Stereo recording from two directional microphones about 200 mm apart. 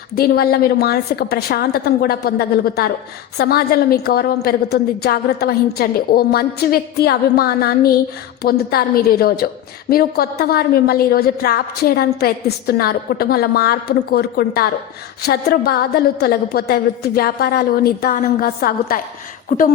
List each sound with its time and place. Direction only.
0.2 s a woman's voice: 50° left (ahead or behind)